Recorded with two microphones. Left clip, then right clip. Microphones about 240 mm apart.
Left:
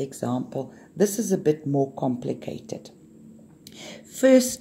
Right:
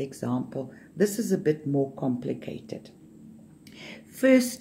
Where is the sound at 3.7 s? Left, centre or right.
Centre.